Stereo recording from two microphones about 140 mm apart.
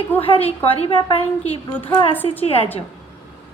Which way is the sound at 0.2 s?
45° left (ahead or behind).